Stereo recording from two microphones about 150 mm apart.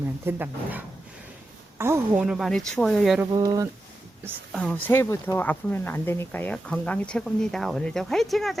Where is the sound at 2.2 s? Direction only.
Centre (ahead or behind).